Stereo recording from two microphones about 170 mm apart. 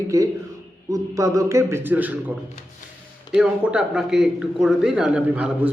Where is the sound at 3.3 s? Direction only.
5° right (ahead or behind).